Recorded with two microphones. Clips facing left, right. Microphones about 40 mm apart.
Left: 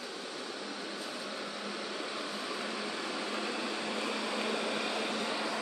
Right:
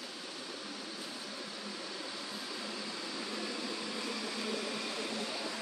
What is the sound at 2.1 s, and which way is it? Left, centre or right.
Vehicle, left.